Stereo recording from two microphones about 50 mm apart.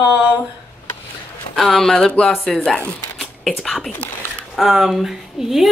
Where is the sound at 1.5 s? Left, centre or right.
Centre.